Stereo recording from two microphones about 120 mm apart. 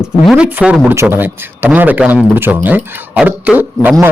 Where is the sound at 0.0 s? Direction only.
10° right (ahead or behind).